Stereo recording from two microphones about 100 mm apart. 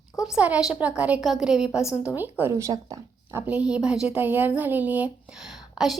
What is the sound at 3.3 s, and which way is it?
A woman's voice, 20° right (ahead or behind).